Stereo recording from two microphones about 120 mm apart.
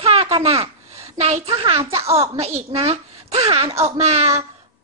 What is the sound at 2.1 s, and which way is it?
Speech, 55° right (ahead or behind).